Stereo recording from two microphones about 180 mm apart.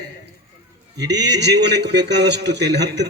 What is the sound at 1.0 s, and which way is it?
A man's voice, 70° right (ahead or behind).